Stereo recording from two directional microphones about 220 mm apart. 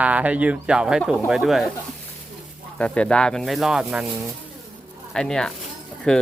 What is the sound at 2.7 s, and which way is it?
Speech, 5° left (ahead or behind).